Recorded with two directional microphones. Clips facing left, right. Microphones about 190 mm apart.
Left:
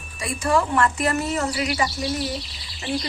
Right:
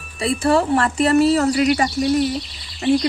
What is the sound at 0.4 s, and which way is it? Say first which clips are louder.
Speech: right 3 dB; 30° right (ahead or behind).